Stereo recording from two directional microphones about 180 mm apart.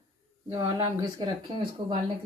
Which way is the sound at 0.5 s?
25° right (ahead or behind).